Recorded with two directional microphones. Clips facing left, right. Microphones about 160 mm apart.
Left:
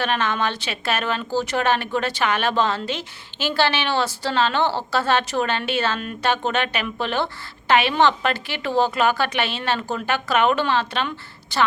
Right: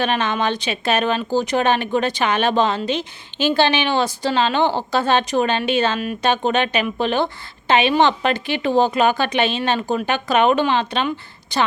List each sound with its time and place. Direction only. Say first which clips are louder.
0.0 s a woman's voice: right 3 dB; 20° right (ahead or behind)